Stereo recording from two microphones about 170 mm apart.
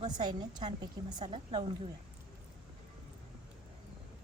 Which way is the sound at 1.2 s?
40° right (ahead or behind).